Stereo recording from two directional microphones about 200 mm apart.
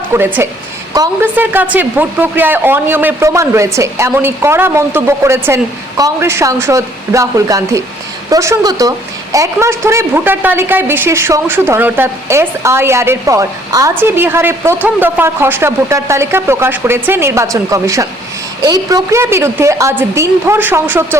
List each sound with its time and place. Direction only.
0.1 s a woman's voice: 10° right (ahead or behind)